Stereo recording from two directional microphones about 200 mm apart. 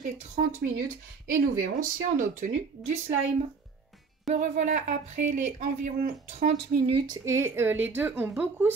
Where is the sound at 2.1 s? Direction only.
40° right (ahead or behind).